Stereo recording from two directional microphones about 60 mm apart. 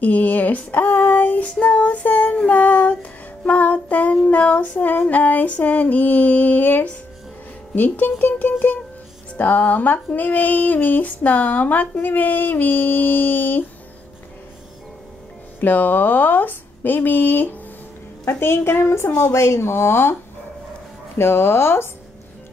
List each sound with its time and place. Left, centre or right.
0.0 s speech: left
0.8 s female singing: left
2.4 s music: left
4.3 s female singing: left
15.6 s female singing: left
18.2 s a woman's voice: left
21.2 s a woman's voice: left